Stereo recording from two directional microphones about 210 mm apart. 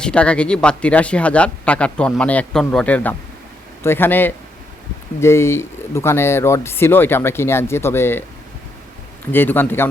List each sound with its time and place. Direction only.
0.0 s speech: 5° left (ahead or behind)
9.3 s speech: 10° left (ahead or behind)